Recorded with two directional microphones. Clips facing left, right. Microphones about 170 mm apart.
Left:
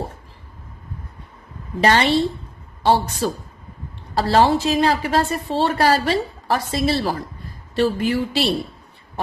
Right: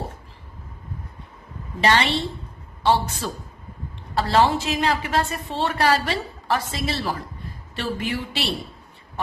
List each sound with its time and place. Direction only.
1.8 s a woman's voice: 40° left (ahead or behind)